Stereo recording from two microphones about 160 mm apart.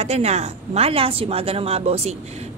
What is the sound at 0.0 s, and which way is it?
A woman's voice, 40° right (ahead or behind).